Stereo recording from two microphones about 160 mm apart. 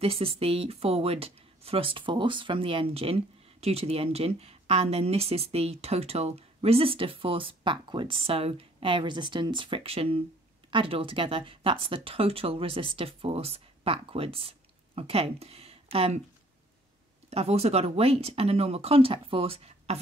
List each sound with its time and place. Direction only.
0.0 s speech: 35° right (ahead or behind)
17.3 s speech: 40° right (ahead or behind)